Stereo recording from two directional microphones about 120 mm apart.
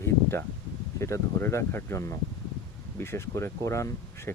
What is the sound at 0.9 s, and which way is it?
Speech, 25° left (ahead or behind).